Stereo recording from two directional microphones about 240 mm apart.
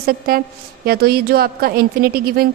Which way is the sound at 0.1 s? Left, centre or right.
Right.